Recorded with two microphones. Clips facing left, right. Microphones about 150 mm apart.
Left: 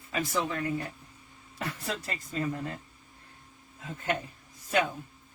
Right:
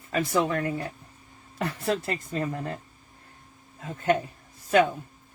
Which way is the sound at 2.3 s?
55° right (ahead or behind).